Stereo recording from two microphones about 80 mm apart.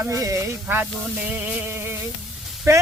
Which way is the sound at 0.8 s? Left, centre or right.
Centre.